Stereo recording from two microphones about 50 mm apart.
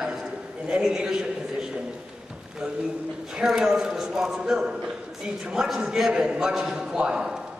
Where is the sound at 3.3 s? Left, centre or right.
Centre.